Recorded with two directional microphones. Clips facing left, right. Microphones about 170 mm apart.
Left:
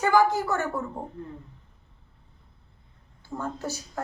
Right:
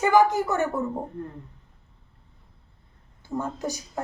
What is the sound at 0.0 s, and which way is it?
Speech, 20° right (ahead or behind).